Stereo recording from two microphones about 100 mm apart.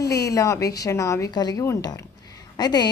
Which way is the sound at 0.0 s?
35° left (ahead or behind).